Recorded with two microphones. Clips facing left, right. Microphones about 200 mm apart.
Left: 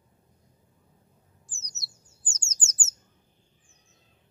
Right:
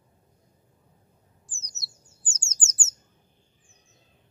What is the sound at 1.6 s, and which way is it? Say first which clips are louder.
Bird: right 2 dB; 20° left (ahead or behind).